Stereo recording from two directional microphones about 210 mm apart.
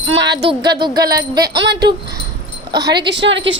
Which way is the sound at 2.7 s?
20° right (ahead or behind).